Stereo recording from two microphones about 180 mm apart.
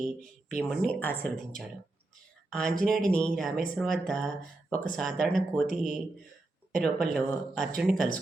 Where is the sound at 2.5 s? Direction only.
5° left (ahead or behind).